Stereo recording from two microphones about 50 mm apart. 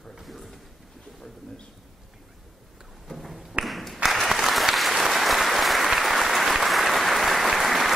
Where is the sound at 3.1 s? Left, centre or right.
Centre.